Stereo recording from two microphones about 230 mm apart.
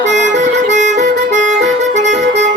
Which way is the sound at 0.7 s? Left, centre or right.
Right.